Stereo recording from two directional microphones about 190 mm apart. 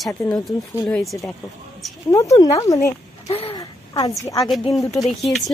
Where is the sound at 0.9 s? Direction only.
Centre (ahead or behind).